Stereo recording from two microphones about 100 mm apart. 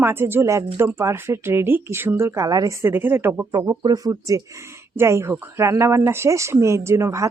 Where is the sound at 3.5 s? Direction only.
40° right (ahead or behind).